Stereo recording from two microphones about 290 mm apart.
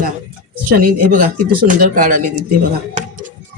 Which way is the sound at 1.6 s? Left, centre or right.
Right.